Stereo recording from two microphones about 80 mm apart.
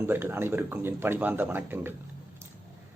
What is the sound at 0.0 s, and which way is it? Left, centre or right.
Speech, right.